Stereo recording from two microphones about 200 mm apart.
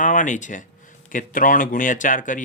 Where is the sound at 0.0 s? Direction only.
40° left (ahead or behind).